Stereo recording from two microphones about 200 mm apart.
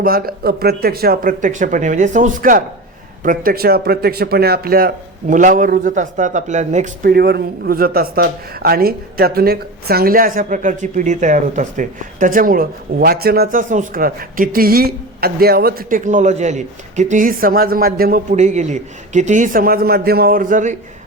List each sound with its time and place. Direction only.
0.0 s speech: 45° right (ahead or behind)